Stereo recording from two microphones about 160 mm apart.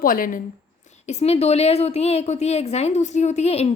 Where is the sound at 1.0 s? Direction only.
40° left (ahead or behind).